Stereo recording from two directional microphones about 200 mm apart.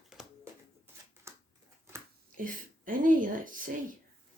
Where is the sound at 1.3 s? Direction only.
15° right (ahead or behind).